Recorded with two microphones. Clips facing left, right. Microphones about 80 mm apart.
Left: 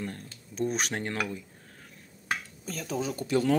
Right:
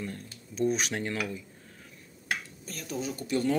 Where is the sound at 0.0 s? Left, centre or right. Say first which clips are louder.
Left 1 dB; left.